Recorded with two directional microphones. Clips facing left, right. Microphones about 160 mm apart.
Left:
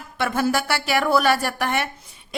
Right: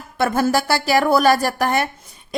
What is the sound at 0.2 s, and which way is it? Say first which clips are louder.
Speech: right 4 dB; 40° right (ahead or behind).